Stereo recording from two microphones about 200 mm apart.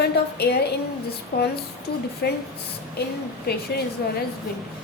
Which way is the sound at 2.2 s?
55° left (ahead or behind).